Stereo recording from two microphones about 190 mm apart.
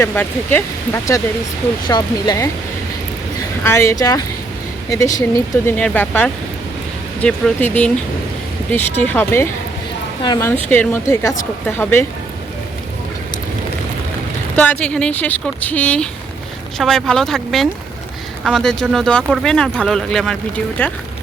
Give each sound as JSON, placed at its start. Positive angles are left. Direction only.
{"t": 0.0, "sound": "speech", "side_deg": 10}
{"t": 1.9, "sound": "speech", "side_deg": 20}
{"t": 3.6, "sound": "speech", "side_deg": 15}
{"t": 10.5, "sound": "speech", "side_deg": 10}
{"t": 14.5, "sound": "speech", "side_deg": 10}